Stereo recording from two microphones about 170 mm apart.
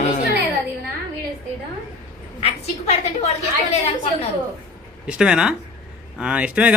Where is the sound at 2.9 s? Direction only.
40° left (ahead or behind).